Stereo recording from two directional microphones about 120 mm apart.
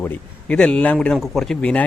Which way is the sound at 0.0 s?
10° left (ahead or behind).